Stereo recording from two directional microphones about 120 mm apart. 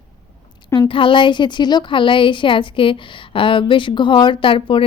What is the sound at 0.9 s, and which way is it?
A woman's voice, 45° left (ahead or behind).